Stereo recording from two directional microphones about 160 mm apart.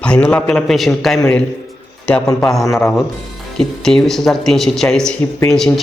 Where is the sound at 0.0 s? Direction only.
5° left (ahead or behind).